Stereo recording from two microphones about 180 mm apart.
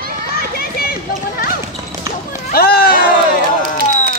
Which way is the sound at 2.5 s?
55° left (ahead or behind).